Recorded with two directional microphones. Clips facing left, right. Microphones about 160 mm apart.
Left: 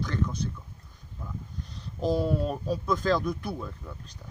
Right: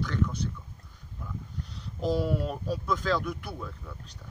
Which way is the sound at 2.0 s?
20° left (ahead or behind).